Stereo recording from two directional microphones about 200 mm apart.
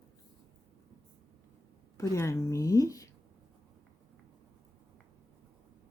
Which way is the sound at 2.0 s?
15° left (ahead or behind).